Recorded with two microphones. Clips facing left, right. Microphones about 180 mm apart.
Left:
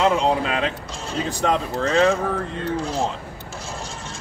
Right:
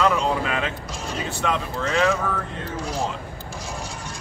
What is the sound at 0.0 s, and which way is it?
Speech, 30° left (ahead or behind).